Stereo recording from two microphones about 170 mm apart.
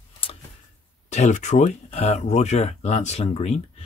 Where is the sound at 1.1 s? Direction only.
45° left (ahead or behind).